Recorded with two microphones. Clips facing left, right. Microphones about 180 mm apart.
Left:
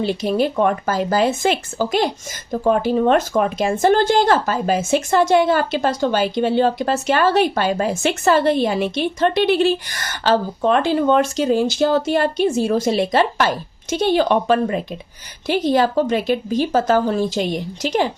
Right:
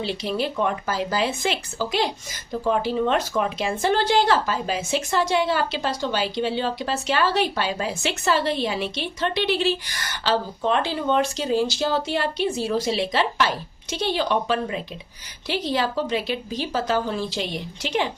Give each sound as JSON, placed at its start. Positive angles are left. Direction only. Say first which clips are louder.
{"t": 0.0, "sound": "speech", "louder": "left 7 dB", "side_deg": 50}